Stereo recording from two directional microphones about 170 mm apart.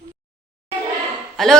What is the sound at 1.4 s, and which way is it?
Speech, centre (ahead or behind).